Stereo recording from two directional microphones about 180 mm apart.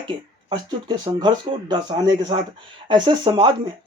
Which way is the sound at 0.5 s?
25° right (ahead or behind).